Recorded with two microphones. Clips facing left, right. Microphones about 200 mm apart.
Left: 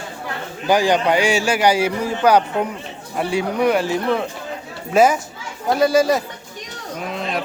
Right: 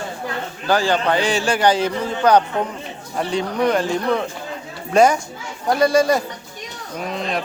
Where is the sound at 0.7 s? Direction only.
15° left (ahead or behind).